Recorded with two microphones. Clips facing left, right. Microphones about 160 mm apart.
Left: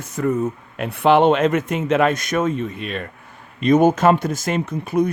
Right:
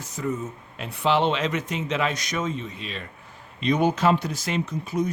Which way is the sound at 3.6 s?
45° left (ahead or behind).